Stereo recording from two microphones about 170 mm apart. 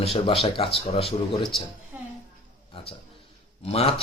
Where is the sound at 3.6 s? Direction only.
35° left (ahead or behind).